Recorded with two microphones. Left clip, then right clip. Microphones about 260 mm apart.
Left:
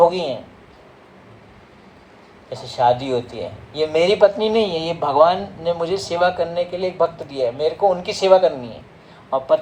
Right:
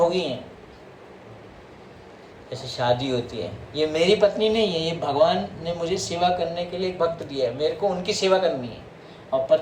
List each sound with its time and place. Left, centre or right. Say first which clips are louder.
0.0 s speech: left 6 dB; left
2.5 s speech: left 6 dB; left